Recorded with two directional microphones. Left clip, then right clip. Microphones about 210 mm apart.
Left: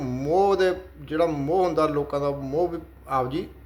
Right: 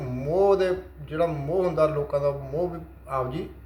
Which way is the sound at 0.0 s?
55° left (ahead or behind).